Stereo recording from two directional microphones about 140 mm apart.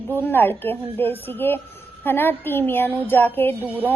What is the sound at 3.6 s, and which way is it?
Speech, 15° right (ahead or behind).